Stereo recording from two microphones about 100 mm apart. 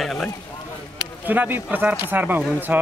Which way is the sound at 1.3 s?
15° right (ahead or behind).